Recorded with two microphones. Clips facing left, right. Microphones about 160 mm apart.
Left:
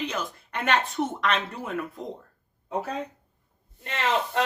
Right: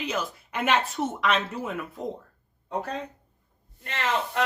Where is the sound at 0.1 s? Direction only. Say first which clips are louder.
Right 2 dB; 5° right (ahead or behind).